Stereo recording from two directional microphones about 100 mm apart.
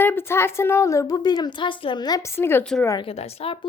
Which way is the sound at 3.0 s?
80° left.